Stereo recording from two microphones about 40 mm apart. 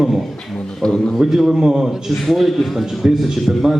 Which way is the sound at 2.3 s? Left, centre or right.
Centre.